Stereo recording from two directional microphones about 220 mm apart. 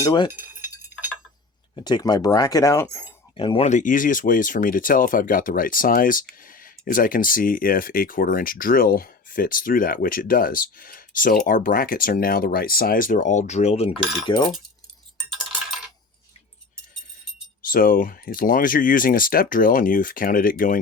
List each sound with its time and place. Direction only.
0.0 s speech: 20° left (ahead or behind)
0.3 s cutlery: 10° right (ahead or behind)
1.7 s speech: 20° left (ahead or behind)
3.3 s speech: 25° left (ahead or behind)
17.6 s speech: 40° left (ahead or behind)